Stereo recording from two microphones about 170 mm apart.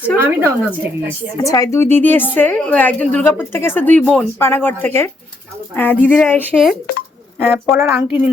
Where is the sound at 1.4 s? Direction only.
20° left (ahead or behind).